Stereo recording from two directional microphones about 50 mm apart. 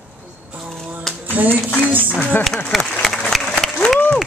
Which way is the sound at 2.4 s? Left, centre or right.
Centre.